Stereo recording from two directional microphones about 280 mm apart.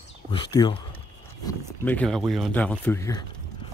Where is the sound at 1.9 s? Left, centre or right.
Centre.